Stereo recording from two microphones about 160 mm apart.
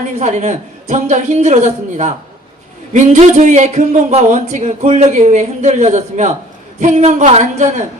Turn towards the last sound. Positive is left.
turn(degrees=-45)  # may be behind; listen again after turning